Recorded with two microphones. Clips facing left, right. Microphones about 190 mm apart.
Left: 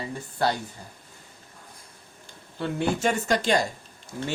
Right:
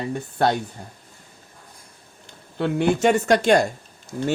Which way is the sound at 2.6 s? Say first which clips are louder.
Right 6 dB; 65° right (ahead or behind).